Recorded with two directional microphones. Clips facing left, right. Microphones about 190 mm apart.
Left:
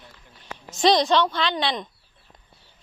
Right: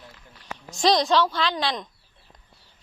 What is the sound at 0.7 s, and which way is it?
A woman's voice, centre (ahead or behind).